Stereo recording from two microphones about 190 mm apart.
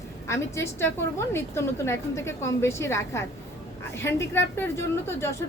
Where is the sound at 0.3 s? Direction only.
15° left (ahead or behind).